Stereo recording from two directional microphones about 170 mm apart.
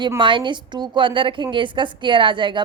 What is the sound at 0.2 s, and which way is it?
A woman's voice, 30° right (ahead or behind).